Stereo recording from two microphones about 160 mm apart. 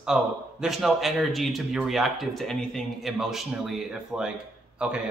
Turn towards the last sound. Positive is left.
turn(degrees=-5)  # may be behind; listen again after turning